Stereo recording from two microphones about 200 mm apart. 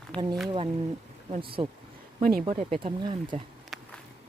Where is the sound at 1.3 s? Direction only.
25° right (ahead or behind).